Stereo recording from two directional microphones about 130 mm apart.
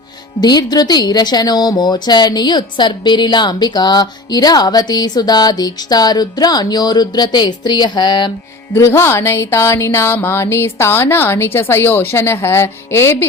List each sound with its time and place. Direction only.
0.3 s a woman's voice: 30° left (ahead or behind)
8.7 s speech: 20° left (ahead or behind)